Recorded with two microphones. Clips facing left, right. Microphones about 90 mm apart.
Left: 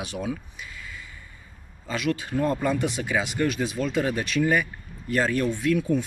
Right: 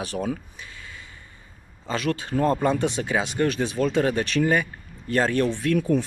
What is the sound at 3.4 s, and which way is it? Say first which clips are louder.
Speech: right 3 dB; 40° right (ahead or behind).